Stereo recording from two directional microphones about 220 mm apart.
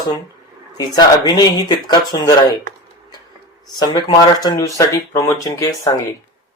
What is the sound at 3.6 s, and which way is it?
Speech, 20° left (ahead or behind).